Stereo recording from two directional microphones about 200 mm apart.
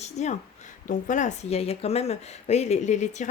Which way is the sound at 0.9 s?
40° left (ahead or behind).